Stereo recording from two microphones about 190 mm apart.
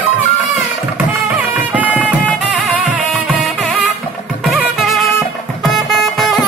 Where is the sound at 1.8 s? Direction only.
5° right (ahead or behind).